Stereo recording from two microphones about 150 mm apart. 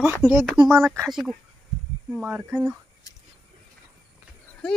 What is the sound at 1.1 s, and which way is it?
A child's voice, centre (ahead or behind).